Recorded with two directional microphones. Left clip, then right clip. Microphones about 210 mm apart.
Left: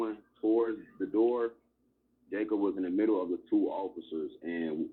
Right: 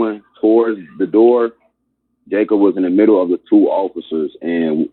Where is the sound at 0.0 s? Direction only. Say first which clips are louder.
Right 17 dB; 50° right (ahead or behind).